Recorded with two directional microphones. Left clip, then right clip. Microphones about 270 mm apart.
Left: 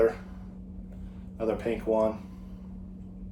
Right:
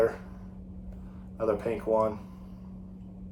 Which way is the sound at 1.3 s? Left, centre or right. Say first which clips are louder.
Right 1 dB; centre.